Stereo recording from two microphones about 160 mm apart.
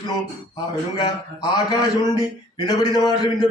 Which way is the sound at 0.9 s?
25° left (ahead or behind).